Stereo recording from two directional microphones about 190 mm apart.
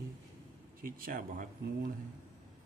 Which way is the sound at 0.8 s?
45° right (ahead or behind).